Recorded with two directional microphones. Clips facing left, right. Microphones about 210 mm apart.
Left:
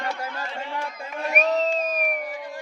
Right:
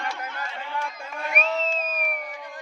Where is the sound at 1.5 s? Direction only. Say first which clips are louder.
Left 5 dB; 40° left (ahead or behind).